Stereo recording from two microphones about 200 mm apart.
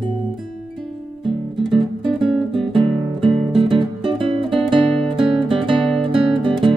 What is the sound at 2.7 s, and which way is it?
Music, 25° right (ahead or behind).